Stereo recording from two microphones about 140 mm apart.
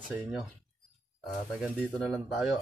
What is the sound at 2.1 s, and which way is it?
Speech, centre (ahead or behind).